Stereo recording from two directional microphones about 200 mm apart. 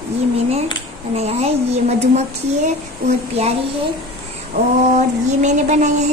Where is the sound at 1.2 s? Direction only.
30° right (ahead or behind).